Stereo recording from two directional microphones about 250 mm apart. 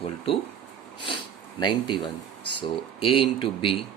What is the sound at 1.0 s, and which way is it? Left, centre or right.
Speech, centre.